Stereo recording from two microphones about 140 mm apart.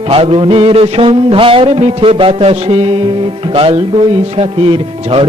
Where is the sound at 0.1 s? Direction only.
40° right (ahead or behind).